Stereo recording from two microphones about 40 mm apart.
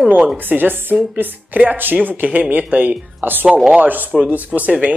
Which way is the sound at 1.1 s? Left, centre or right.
Right.